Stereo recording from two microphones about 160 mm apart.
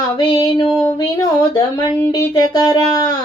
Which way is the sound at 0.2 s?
30° left (ahead or behind).